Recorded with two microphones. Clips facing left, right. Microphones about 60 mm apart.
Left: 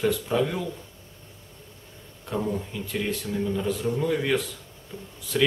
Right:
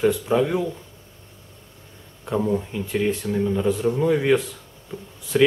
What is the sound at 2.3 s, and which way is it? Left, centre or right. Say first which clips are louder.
Speech: right 6 dB; centre.